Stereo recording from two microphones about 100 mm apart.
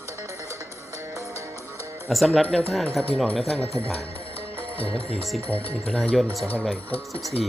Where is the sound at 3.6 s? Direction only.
85° left.